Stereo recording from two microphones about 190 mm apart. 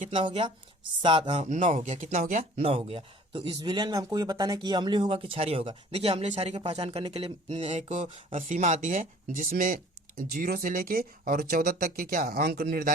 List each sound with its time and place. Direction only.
0.2 s speech: 25° right (ahead or behind); by 12.9 s 50° right (ahead or behind)